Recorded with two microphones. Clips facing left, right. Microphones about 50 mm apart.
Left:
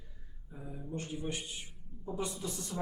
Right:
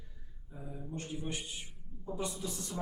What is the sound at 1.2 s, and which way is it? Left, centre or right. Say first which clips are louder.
Speech: left 1 dB; left.